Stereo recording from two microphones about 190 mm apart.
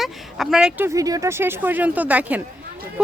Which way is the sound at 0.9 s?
20° right (ahead or behind).